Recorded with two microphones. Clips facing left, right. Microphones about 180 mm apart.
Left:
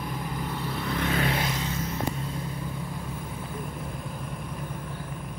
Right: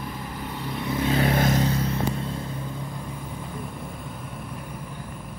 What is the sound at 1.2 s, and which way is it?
Vehicle, 40° right (ahead or behind).